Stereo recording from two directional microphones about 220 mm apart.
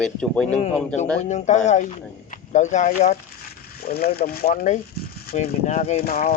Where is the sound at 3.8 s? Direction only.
45° left (ahead or behind).